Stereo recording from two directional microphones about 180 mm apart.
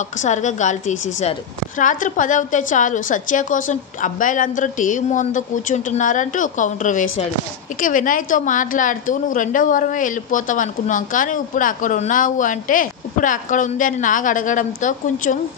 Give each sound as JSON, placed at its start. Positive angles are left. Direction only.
{"t": 0.2, "sound": "a woman's voice", "side_deg": 40}